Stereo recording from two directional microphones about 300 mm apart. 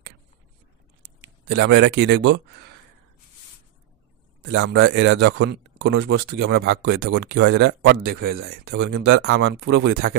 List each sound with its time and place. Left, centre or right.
1.0 s speech: right
4.5 s speech: right